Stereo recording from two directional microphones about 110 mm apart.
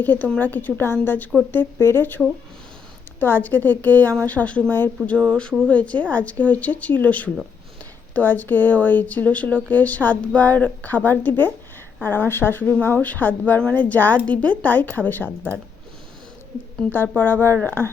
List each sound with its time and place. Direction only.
0.0 s a woman's voice: 15° left (ahead or behind)
16.9 s a woman's voice: 20° left (ahead or behind)